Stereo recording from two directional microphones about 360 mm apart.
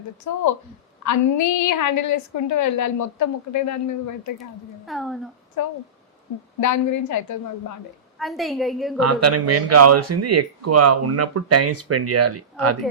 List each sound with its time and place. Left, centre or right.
0.3 s a woman's voice: left
4.9 s a woman's voice: centre
5.6 s a woman's voice: left
8.2 s a woman's voice: centre
9.0 s speech: right